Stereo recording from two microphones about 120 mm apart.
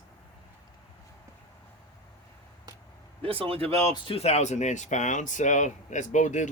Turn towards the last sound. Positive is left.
turn(degrees=90)